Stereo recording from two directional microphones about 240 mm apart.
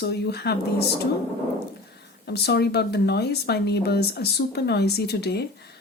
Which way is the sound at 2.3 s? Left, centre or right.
Left.